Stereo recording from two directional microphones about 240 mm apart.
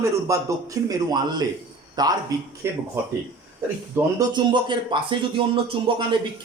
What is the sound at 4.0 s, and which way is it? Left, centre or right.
A man's voice, centre.